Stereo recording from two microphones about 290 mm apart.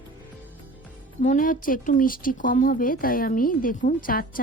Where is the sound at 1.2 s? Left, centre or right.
Left.